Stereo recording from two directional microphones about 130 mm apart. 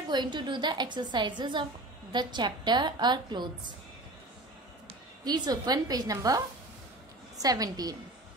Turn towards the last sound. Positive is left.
turn(degrees=-30)  # may be behind; listen again after turning